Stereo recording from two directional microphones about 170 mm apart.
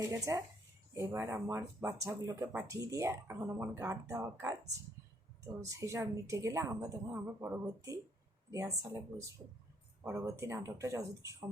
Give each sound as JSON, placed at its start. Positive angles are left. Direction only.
{"t": 0.0, "sound": "speech", "side_deg": -20}
{"t": 5.5, "sound": "speech", "side_deg": -20}